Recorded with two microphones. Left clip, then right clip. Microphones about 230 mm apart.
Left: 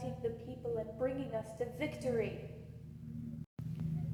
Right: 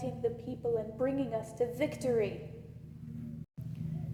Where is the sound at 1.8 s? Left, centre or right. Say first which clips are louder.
Right 4 dB; right.